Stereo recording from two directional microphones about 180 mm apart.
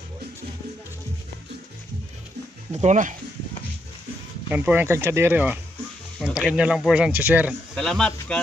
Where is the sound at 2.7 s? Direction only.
40° right (ahead or behind).